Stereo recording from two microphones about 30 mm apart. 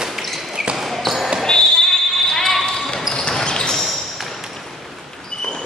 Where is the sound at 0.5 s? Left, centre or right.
Right.